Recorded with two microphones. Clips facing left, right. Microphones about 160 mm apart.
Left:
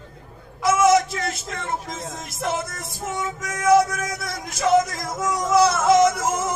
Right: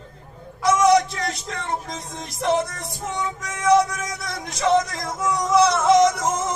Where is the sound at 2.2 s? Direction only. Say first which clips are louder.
Right 5 dB; 35° right (ahead or behind).